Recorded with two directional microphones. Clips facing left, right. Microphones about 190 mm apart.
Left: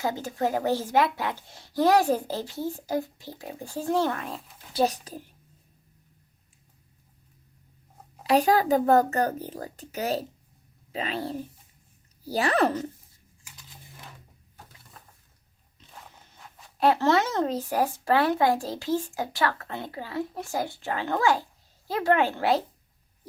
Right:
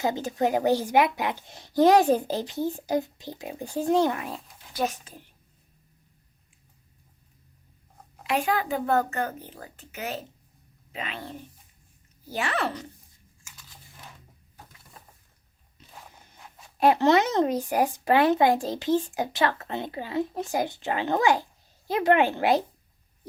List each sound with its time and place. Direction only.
0.0 s a child's voice: 20° right (ahead or behind)
4.7 s speech: 35° left (ahead or behind)
8.2 s speech: 35° left (ahead or behind)
16.8 s a child's voice: 15° right (ahead or behind)